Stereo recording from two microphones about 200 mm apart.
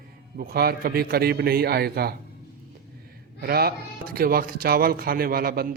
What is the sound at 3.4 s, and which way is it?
Speech, 50° right (ahead or behind).